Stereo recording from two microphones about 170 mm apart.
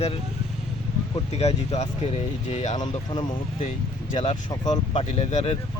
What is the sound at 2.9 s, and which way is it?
Speech, 25° left (ahead or behind).